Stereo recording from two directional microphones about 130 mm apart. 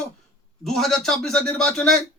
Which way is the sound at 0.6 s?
5° left (ahead or behind).